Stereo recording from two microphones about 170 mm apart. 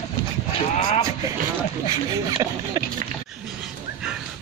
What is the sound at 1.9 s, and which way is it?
Speech, 20° right (ahead or behind).